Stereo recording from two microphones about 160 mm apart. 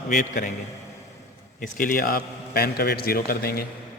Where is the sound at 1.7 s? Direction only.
60° left (ahead or behind).